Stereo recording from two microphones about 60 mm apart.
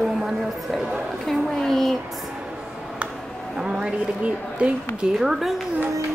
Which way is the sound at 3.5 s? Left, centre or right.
Centre.